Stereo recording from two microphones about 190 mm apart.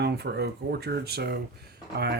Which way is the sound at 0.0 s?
60° right (ahead or behind).